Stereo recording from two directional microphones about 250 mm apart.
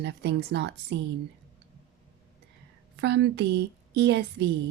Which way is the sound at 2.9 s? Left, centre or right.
Right.